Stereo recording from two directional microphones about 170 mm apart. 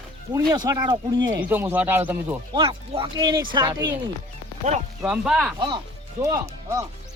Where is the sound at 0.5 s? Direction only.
25° right (ahead or behind).